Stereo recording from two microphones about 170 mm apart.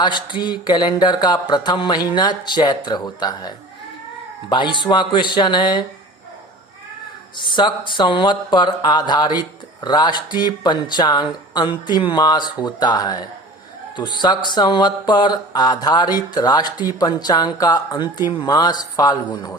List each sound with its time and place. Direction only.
0.0 s speech: 25° left (ahead or behind)
7.3 s speech: 25° left (ahead or behind)